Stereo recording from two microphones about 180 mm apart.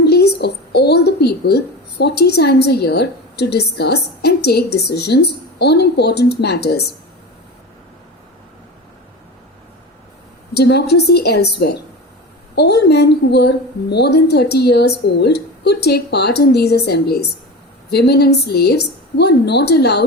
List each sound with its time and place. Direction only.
0.0 s speech: 65° left (ahead or behind)
10.5 s a woman's voice: 65° left (ahead or behind)